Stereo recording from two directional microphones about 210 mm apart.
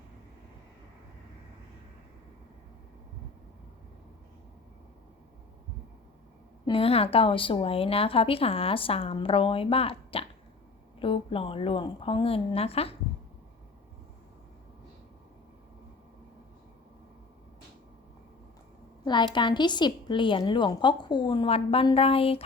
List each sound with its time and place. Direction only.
6.7 s speech: 25° left (ahead or behind)
19.0 s speech: 20° left (ahead or behind)